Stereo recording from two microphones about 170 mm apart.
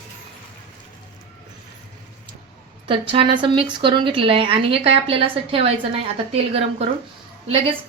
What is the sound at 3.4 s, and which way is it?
A woman's voice, 30° right (ahead or behind).